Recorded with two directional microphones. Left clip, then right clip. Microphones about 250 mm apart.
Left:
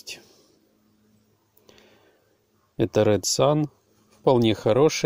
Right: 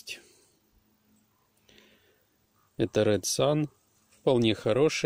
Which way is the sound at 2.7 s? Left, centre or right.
Centre.